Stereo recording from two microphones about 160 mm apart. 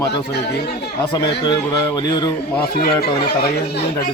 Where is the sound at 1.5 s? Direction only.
25° left (ahead or behind).